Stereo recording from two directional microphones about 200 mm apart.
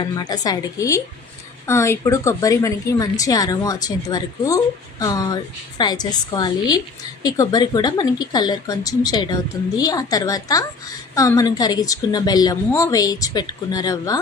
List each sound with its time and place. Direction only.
0.0 s a woman's voice: 20° left (ahead or behind)